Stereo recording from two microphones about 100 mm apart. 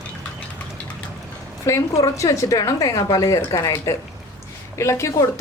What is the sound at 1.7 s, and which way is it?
A woman's voice, 30° left (ahead or behind).